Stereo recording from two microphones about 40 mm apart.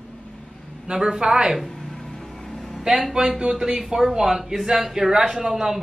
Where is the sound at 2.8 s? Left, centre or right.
Centre.